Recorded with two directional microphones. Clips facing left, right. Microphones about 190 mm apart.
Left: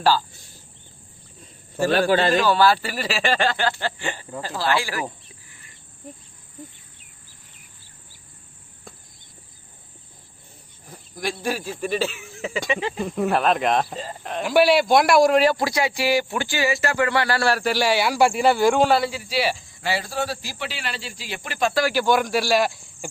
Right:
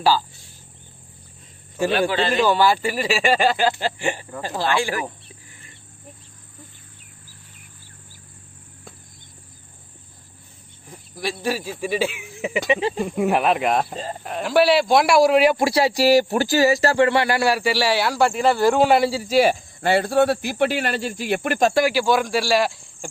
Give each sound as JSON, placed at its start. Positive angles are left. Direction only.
{"t": 1.9, "sound": "speech", "side_deg": 40}
{"t": 2.5, "sound": "speech", "side_deg": -15}
{"t": 11.2, "sound": "speech", "side_deg": -5}
{"t": 13.1, "sound": "speech", "side_deg": -10}
{"t": 15.5, "sound": "speech", "side_deg": -30}
{"t": 17.5, "sound": "speech", "side_deg": -5}
{"t": 18.9, "sound": "speech", "side_deg": -25}
{"t": 19.2, "sound": "speech", "side_deg": -45}
{"t": 21.8, "sound": "speech", "side_deg": -5}